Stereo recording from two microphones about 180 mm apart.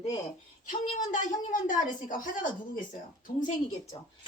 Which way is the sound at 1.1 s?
45° left (ahead or behind).